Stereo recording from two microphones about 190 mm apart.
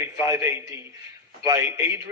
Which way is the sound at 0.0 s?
15° right (ahead or behind).